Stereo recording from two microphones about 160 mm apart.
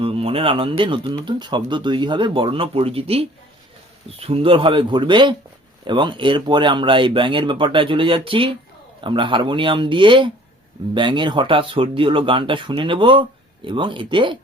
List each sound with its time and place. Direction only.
0.0 s speech: 35° right (ahead or behind)